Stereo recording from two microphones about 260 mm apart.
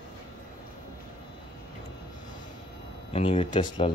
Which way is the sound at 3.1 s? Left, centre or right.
Left.